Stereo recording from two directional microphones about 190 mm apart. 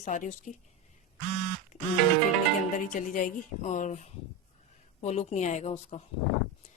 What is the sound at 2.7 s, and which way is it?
A woman's voice, 45° left (ahead or behind).